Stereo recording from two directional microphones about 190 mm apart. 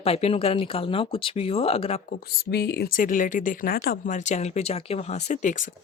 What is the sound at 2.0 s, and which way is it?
Speech, 55° left (ahead or behind).